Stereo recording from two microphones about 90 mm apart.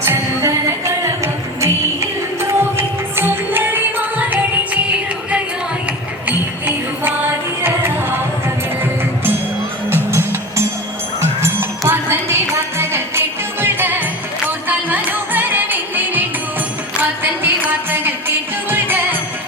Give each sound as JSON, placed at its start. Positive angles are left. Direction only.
{"t": 0.0, "sound": "music", "side_deg": -30}
{"t": 6.2, "sound": "music", "side_deg": -20}
{"t": 9.9, "sound": "music", "side_deg": -30}
{"t": 11.8, "sound": "music", "side_deg": -30}
{"t": 17.6, "sound": "music", "side_deg": -20}